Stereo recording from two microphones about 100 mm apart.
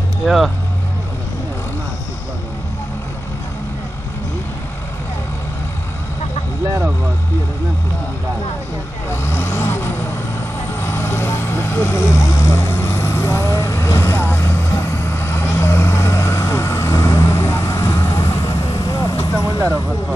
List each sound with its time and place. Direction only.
0.2 s speech: centre (ahead or behind)
9.1 s vehicle: 25° left (ahead or behind)